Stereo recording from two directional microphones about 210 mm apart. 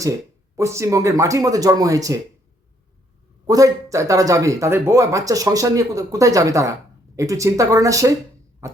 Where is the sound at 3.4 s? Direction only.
15° right (ahead or behind).